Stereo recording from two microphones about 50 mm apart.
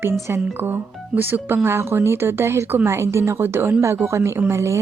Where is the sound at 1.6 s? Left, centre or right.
Right.